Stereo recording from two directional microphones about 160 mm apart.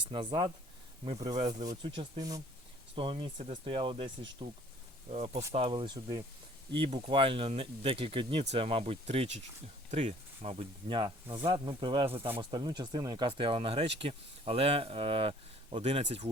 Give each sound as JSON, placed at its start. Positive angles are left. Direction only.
{"t": 0.1, "sound": "speech", "side_deg": -30}
{"t": 5.0, "sound": "speech", "side_deg": -40}